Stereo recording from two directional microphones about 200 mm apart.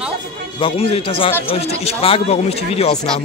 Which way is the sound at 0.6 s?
30° left (ahead or behind).